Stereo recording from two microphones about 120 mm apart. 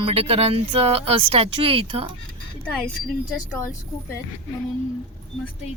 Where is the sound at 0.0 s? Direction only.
55° right (ahead or behind).